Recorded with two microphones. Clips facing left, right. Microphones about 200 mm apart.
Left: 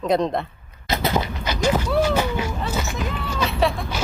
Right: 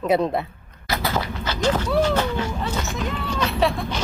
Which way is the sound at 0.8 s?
20° left (ahead or behind).